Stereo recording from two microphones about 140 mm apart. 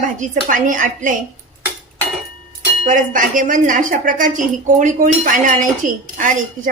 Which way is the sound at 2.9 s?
70° right (ahead or behind).